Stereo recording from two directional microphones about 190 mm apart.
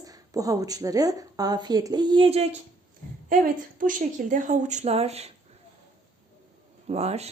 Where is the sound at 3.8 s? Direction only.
45° right (ahead or behind).